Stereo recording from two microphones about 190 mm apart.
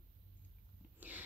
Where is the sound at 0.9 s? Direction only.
10° right (ahead or behind).